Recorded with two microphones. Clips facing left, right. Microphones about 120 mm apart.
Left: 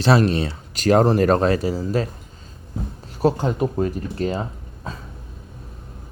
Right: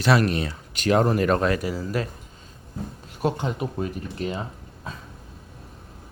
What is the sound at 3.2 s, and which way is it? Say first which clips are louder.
Speech: left 6 dB; 35° left (ahead or behind).